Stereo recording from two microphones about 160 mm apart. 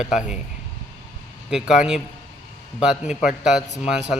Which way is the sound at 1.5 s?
Centre (ahead or behind).